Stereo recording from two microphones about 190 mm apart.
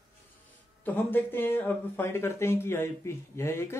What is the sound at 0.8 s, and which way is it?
Speech, 10° left (ahead or behind).